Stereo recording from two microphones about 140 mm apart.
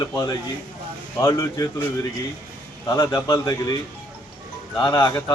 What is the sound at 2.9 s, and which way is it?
Speech, 25° left (ahead or behind).